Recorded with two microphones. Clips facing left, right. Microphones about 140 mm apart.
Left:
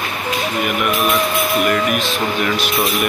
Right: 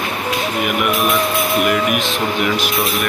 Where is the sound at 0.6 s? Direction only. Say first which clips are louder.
Right 1 dB; centre (ahead or behind).